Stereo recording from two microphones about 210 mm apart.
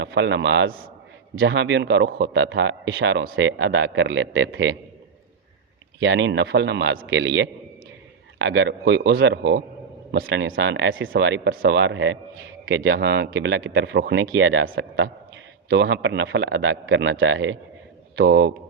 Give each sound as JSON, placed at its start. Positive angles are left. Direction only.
{"t": 0.0, "sound": "a man's voice", "side_deg": -60}
{"t": 1.4, "sound": "a man's voice", "side_deg": -60}
{"t": 6.0, "sound": "a man's voice", "side_deg": -60}
{"t": 11.1, "sound": "a man's voice", "side_deg": -55}